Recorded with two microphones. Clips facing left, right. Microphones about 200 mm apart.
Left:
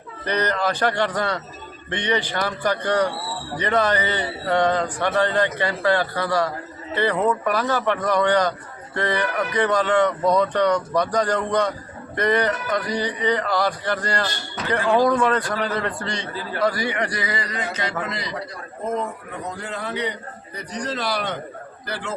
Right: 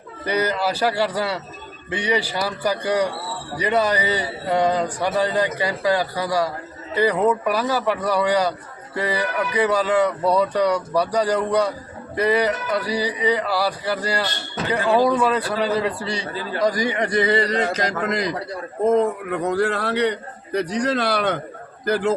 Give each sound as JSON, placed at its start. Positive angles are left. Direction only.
{"t": 0.3, "sound": "a man's voice", "side_deg": -10}
{"t": 18.9, "sound": "a man's voice", "side_deg": -70}
{"t": 21.8, "sound": "a man's voice", "side_deg": -45}